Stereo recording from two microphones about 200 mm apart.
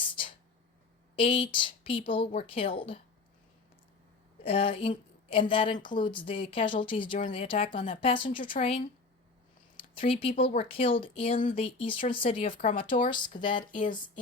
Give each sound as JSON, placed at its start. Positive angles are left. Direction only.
{"t": 0.0, "sound": "a sound", "side_deg": 25}
{"t": 1.2, "sound": "a woman's voice", "side_deg": 25}
{"t": 4.4, "sound": "a woman's voice", "side_deg": 30}
{"t": 9.7, "sound": "a woman's voice", "side_deg": 25}